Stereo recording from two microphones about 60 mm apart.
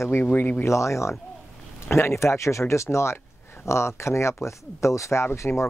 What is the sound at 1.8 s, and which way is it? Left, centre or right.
Speech, left.